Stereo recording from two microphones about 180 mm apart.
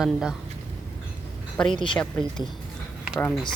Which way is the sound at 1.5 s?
5° left (ahead or behind).